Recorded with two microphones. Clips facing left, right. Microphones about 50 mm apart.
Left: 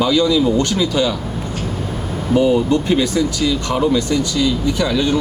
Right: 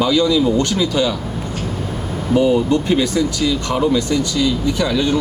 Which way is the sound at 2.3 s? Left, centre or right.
Centre.